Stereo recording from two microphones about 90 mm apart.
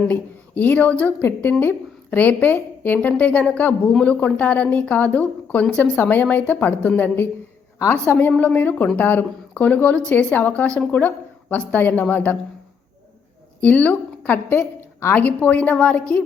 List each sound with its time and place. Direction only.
0.1 s a woman's voice: 20° left (ahead or behind)
13.6 s a woman's voice: 15° left (ahead or behind)